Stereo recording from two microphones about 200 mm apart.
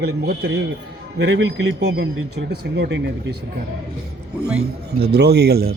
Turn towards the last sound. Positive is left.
turn(degrees=-55)  # may be behind; listen again after turning